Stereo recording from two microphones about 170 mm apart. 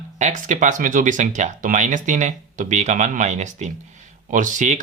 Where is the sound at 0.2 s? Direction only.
45° right (ahead or behind).